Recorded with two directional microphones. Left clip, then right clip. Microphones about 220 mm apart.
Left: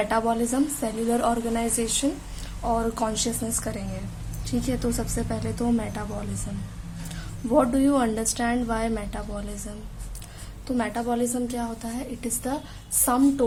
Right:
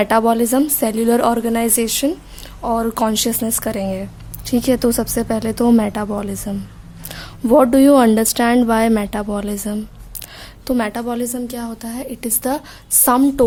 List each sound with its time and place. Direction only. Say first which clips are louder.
0.0 s a woman's voice: right 9 dB; 45° right (ahead or behind)